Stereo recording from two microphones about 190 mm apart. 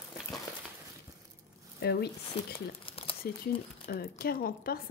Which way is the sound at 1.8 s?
55° left (ahead or behind).